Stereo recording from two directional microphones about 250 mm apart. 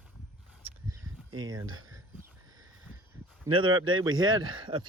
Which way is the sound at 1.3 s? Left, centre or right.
Right.